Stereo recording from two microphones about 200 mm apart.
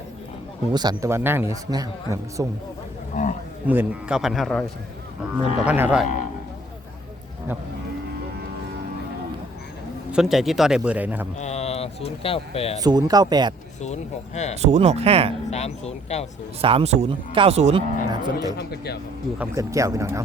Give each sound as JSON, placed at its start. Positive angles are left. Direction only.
{"t": 0.7, "sound": "a man's voice", "side_deg": -20}
{"t": 3.2, "sound": "speech", "side_deg": 40}
{"t": 3.7, "sound": "a man's voice", "side_deg": -5}
{"t": 5.6, "sound": "a man's voice", "side_deg": -10}
{"t": 10.1, "sound": "a man's voice", "side_deg": 0}
{"t": 11.3, "sound": "speech", "side_deg": 35}
{"t": 12.8, "sound": "speech", "side_deg": -20}
{"t": 13.8, "sound": "speech", "side_deg": 35}
{"t": 14.5, "sound": "speech", "side_deg": -35}
{"t": 15.4, "sound": "speech", "side_deg": 35}
{"t": 16.6, "sound": "speech", "side_deg": -30}
{"t": 18.1, "sound": "speech", "side_deg": -20}
{"t": 18.5, "sound": "speech", "side_deg": 55}
{"t": 19.4, "sound": "a man's voice", "side_deg": -15}